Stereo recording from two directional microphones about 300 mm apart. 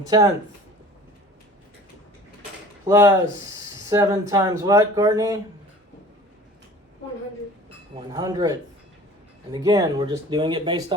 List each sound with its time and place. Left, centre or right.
0.0 s speech: centre
2.8 s speech: centre
7.9 s speech: centre